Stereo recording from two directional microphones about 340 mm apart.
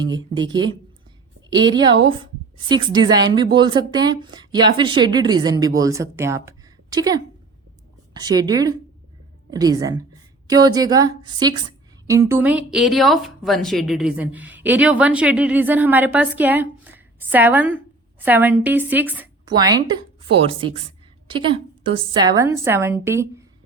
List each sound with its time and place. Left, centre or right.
0.0 s a woman's voice: centre